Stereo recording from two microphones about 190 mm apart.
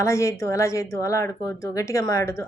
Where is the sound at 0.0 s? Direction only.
15° left (ahead or behind).